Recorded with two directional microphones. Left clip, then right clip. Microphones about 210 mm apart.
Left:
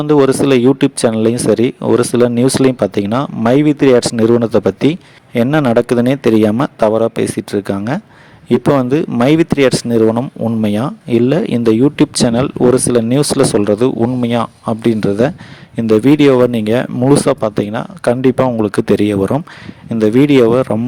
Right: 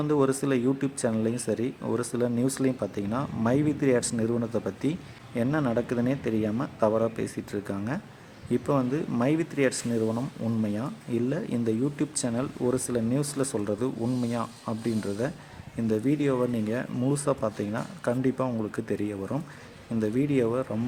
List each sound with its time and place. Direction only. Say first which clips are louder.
0.0 s speech: left 15 dB; 40° left (ahead or behind)